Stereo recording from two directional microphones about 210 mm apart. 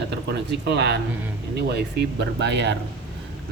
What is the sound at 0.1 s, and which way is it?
Speech, 55° right (ahead or behind).